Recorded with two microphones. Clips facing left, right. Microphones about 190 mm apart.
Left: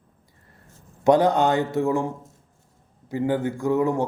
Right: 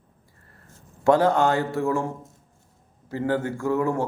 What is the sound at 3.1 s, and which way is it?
Speech, 15° left (ahead or behind).